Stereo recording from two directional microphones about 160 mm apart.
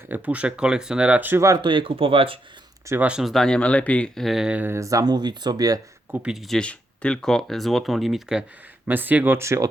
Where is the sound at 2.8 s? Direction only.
15° right (ahead or behind).